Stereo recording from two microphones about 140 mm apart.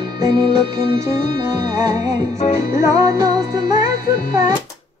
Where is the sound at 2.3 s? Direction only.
50° left (ahead or behind).